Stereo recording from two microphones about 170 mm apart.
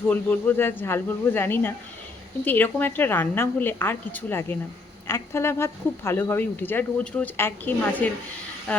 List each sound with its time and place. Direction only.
0.1 s speech: 10° left (ahead or behind)